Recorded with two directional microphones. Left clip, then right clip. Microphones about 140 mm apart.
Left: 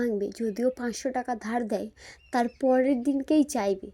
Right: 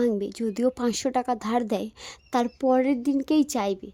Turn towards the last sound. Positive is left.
turn(degrees=-15)  # may be behind; listen again after turning